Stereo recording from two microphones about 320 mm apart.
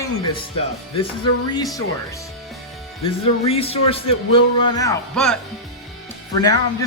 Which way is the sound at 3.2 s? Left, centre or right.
Centre.